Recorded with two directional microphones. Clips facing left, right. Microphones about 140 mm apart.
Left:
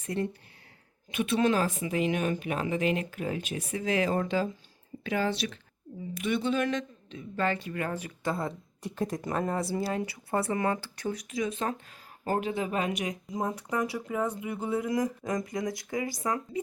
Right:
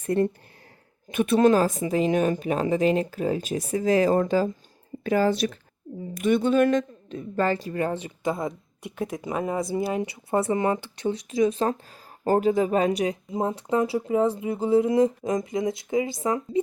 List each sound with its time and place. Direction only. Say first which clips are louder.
0.0 s speech: right 8 dB; 55° right (ahead or behind); by 16.6 s 25° right (ahead or behind)